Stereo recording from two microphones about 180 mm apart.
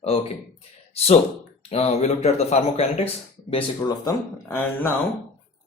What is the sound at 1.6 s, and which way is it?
Speech, 35° left (ahead or behind).